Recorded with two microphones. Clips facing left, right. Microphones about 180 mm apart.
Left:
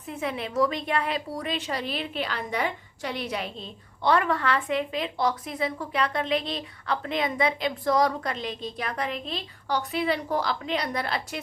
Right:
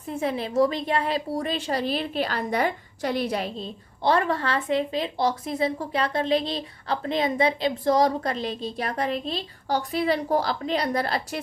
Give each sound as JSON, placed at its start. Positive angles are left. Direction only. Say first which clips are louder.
{"t": 0.1, "sound": "a woman's voice", "louder": "right 4 dB", "side_deg": -35}